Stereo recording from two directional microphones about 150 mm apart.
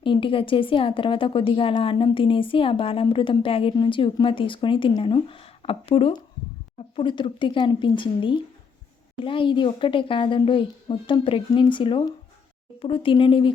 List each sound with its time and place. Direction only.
0.0 s a woman's voice: 35° left (ahead or behind)